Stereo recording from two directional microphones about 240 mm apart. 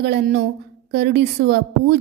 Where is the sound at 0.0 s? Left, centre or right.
Right.